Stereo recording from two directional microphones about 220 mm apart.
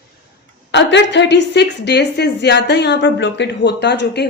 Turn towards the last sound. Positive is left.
turn(degrees=50)  # may be behind; listen again after turning